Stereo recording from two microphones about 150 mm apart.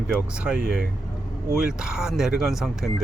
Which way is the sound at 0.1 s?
5° right (ahead or behind).